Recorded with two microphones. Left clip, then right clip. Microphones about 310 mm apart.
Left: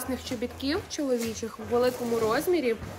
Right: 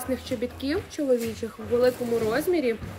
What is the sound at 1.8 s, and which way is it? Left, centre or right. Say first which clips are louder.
Speech: right 2 dB; centre.